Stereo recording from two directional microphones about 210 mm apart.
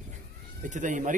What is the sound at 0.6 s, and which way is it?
Speech, 35° right (ahead or behind).